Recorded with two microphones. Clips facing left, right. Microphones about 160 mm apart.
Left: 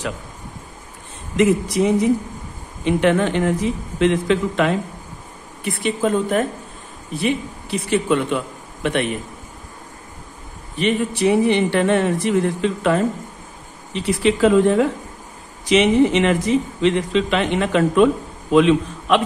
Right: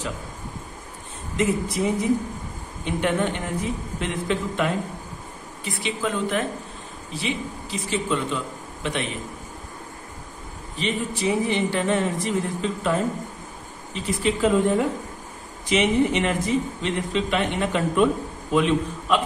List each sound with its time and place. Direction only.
1.3 s speech: 85° left
2.8 s speech: 90° left
5.6 s a woman's voice: 55° left (ahead or behind)
7.2 s a man's voice: 60° left (ahead or behind)
10.8 s a man's voice: 65° left (ahead or behind); by 19.2 s 85° left